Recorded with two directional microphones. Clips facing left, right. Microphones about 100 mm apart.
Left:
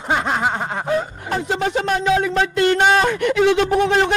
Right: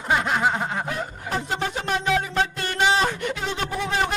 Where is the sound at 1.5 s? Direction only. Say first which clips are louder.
Left 8 dB; 90° left.